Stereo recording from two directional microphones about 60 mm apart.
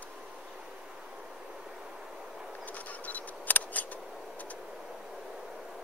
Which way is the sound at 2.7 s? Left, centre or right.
Left.